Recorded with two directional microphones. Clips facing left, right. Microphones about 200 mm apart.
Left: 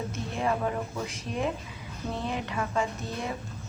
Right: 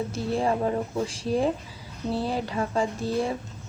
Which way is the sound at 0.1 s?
30° right (ahead or behind).